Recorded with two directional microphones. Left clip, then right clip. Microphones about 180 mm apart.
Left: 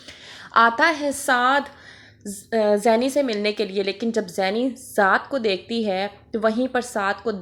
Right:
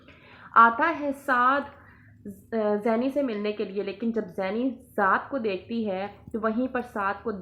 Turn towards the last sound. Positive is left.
turn(degrees=25)  # may be behind; listen again after turning